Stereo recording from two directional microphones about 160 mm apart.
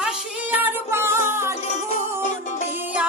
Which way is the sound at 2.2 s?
50° left (ahead or behind).